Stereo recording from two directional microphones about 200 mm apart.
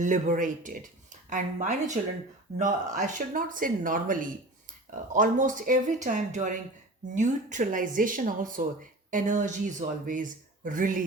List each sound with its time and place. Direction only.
0.0 s speech: 40° right (ahead or behind)